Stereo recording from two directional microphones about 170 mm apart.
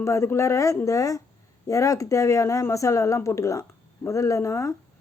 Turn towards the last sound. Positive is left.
turn(degrees=15)  # may be behind; listen again after turning